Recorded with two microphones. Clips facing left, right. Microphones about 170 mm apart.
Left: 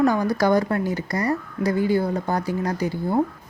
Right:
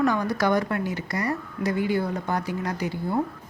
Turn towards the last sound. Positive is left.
turn(degrees=35)  # may be behind; listen again after turning